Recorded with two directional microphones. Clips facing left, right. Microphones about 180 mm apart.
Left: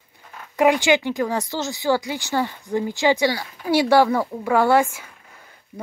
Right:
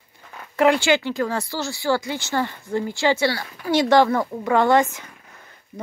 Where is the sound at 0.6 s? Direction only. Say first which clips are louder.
Even; 15° left (ahead or behind).